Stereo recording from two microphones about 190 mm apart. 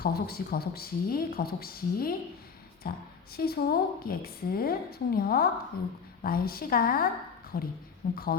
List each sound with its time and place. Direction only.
0.0 s speech: 55° left (ahead or behind)